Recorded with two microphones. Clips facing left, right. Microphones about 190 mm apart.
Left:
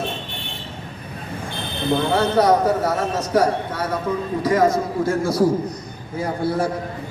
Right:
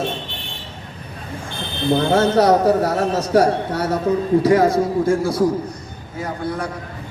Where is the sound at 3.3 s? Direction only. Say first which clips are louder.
Right 3 dB; 40° right (ahead or behind).